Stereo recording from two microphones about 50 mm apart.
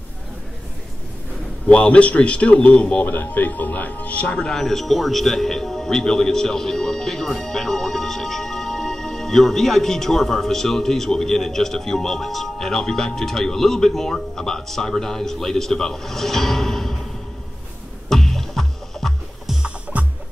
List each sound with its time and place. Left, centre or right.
1.7 s a man's voice: left
3.1 s speech: left
4.6 s a man's voice: centre
18.1 s music: centre
19.6 s music: right